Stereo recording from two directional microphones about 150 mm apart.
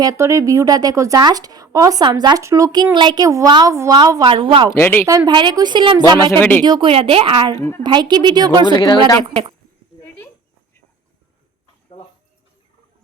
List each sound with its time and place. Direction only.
0.0 s speech: 20° right (ahead or behind)
4.8 s a woman's voice: 15° left (ahead or behind)
5.0 s speech: 25° right (ahead or behind)
6.3 s a woman's voice: 10° left (ahead or behind)
6.6 s a woman's voice: 30° right (ahead or behind)
8.7 s speech: 30° left (ahead or behind)